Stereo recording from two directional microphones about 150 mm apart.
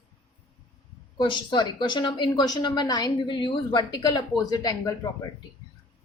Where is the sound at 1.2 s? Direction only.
30° left (ahead or behind).